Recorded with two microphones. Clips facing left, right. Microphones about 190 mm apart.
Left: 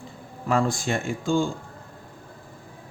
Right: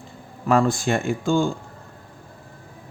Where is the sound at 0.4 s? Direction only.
60° right (ahead or behind).